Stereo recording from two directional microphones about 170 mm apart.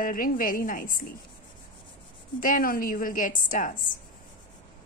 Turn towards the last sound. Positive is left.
turn(degrees=50)  # may be behind; listen again after turning